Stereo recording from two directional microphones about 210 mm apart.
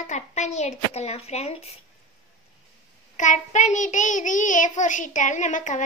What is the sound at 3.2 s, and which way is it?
A child's voice, 35° left (ahead or behind).